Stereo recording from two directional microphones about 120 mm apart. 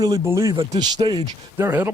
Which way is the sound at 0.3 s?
25° right (ahead or behind).